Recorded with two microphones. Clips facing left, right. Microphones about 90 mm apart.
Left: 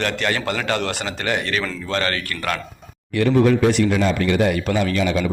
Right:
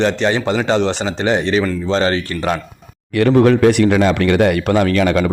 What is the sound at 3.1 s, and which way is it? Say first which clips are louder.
A man's voice: right 4 dB; 60° right (ahead or behind).